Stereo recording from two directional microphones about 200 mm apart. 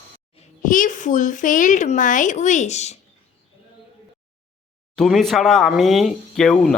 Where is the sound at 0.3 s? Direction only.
40° left (ahead or behind).